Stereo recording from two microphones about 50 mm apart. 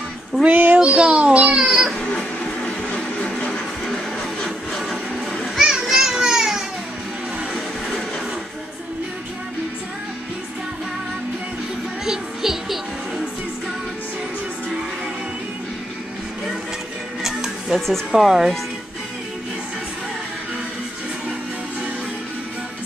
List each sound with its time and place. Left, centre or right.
0.5 s child singing: right
0.7 s a sound: centre
1.6 s a sound: centre
2.0 s a sound: left
3.8 s music: centre
5.6 s children playing: centre
12.0 s music: centre
17.2 s music: centre
17.7 s speech: centre
18.1 s speech: centre